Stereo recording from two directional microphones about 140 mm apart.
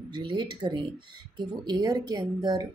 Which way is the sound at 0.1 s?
35° right (ahead or behind).